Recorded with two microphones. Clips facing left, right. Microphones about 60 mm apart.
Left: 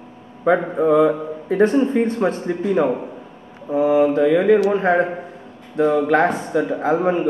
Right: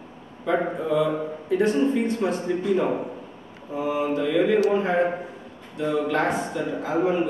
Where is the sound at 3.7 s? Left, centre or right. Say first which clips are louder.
Left 9 dB; left.